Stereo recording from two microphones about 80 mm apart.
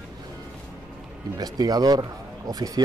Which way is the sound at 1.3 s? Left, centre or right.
Right.